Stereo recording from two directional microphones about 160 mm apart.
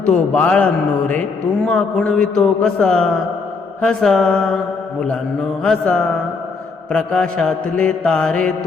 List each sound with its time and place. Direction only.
0.0 s a man's voice: 10° left (ahead or behind)
3.8 s mantra: 5° left (ahead or behind)
5.6 s a man's voice: 5° left (ahead or behind)
6.9 s mantra: 5° left (ahead or behind)